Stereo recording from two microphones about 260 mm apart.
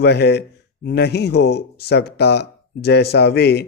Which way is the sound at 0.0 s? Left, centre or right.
Left.